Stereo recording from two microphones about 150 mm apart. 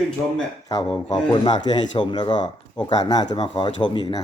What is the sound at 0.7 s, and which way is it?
Speech, 30° left (ahead or behind).